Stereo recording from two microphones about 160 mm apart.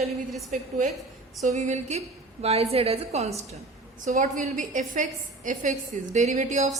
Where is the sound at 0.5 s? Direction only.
55° right (ahead or behind).